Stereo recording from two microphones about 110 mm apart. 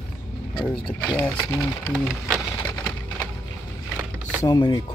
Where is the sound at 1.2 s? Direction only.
20° left (ahead or behind).